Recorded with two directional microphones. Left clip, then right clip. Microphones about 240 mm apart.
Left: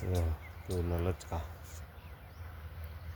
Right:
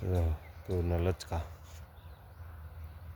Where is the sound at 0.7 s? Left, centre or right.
Right.